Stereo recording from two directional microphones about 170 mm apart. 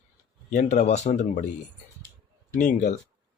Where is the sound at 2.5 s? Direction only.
50° left (ahead or behind).